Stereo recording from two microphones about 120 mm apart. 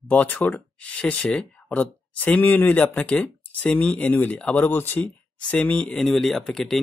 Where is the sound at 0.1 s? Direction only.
10° left (ahead or behind).